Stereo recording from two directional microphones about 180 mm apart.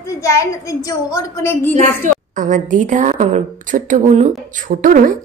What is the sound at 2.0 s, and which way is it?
A woman's voice, 45° right (ahead or behind).